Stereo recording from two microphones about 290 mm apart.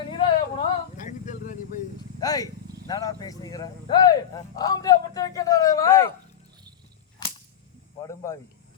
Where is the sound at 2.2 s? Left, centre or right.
Centre.